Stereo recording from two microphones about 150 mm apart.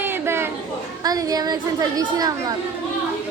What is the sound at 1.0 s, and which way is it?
Speech, 25° right (ahead or behind).